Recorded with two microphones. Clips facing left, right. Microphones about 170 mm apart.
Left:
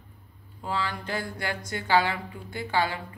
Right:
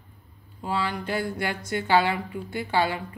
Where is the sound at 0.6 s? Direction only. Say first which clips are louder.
Right 3 dB; 20° right (ahead or behind).